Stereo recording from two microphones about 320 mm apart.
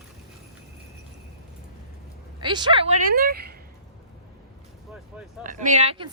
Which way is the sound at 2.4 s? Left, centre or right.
Centre.